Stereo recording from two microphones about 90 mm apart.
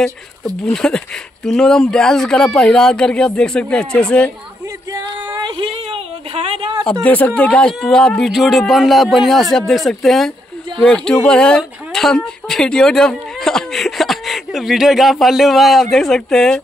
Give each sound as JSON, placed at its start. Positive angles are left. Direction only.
{"t": 0.7, "sound": "speech", "side_deg": 10}
{"t": 5.4, "sound": "a sound", "side_deg": -80}
{"t": 6.8, "sound": "speech", "side_deg": 10}